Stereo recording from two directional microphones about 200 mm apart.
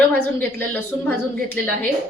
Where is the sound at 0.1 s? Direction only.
5° left (ahead or behind).